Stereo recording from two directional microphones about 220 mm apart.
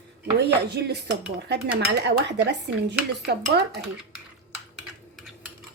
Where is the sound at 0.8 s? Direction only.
50° right (ahead or behind).